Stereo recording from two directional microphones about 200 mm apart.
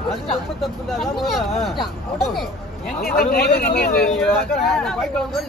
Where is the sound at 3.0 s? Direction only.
50° left (ahead or behind).